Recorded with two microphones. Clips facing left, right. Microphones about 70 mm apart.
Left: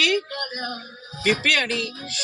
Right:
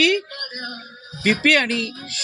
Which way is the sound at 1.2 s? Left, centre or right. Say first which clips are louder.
Right 4 dB; right.